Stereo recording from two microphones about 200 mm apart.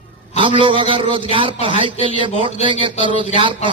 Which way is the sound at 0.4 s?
25° right (ahead or behind).